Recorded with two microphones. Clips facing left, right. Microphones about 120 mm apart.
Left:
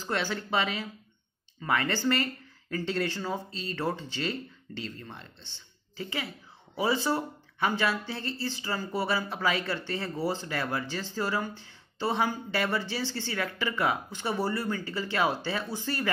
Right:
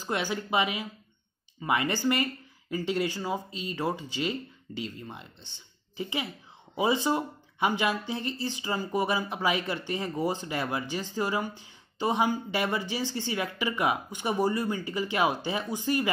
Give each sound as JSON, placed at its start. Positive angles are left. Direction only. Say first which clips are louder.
{"t": 0.0, "sound": "speech", "louder": "right 1 dB", "side_deg": -15}